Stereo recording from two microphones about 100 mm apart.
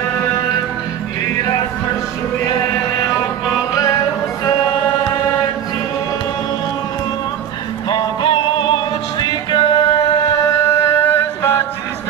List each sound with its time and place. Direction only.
1.3 s music: 30° left (ahead or behind)
3.0 s music: 40° left (ahead or behind)
7.9 s music: 55° left (ahead or behind)
10.4 s music: 30° left (ahead or behind)